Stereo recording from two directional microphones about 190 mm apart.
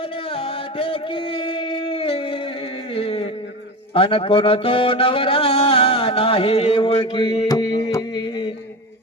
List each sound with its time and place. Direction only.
0.3 s singing: 30° left (ahead or behind)
2.9 s a sound: 30° left (ahead or behind)
3.9 s speech: 30° left (ahead or behind)